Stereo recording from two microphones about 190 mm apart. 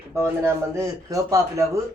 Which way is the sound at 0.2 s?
15° right (ahead or behind).